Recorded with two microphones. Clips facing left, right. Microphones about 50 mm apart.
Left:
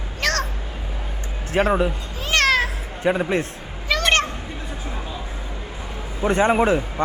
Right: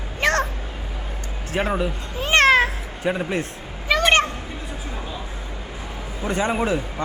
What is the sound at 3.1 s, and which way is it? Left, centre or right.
Speech, centre.